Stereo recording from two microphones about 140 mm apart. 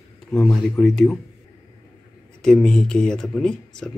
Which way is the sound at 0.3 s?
Centre (ahead or behind).